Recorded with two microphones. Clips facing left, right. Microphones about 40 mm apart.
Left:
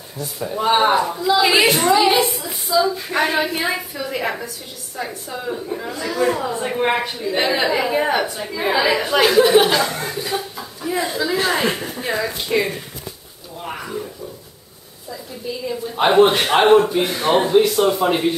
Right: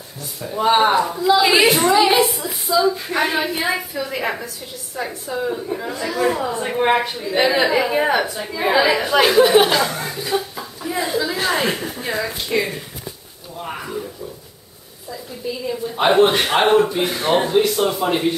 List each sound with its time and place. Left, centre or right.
0.2 s a woman's voice: centre
13.6 s a sound: centre
15.0 s a woman's voice: centre